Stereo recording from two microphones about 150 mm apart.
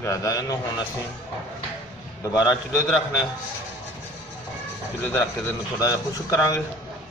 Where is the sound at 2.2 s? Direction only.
25° left (ahead or behind).